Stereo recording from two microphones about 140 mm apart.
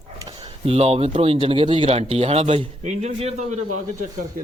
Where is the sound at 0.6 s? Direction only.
45° right (ahead or behind).